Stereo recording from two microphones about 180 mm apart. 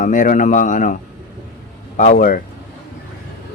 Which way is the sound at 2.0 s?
45° left (ahead or behind).